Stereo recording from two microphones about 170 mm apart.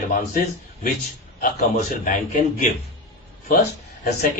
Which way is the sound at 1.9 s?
50° left (ahead or behind).